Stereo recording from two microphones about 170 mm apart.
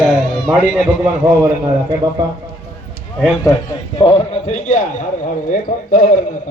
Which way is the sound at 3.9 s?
35° left (ahead or behind).